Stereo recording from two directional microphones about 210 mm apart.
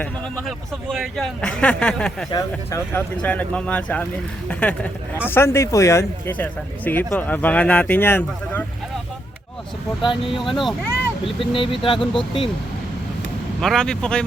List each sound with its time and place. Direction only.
0.0 s speech: 5° left (ahead or behind)
2.3 s speech: 15° left (ahead or behind)
10.0 s speech: 25° left (ahead or behind)
10.4 s speech: centre (ahead or behind)
11.3 s speech: 25° left (ahead or behind)
13.6 s speech: centre (ahead or behind)